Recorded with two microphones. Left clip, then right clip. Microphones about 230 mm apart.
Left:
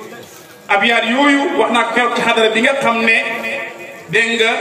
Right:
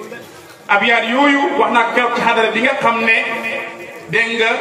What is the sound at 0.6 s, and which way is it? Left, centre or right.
A man's voice, left.